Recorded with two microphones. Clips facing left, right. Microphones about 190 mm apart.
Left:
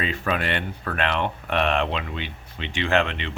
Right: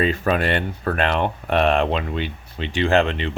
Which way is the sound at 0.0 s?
40° right (ahead or behind).